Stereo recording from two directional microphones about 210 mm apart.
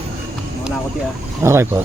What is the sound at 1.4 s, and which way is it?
Speech, 10° right (ahead or behind).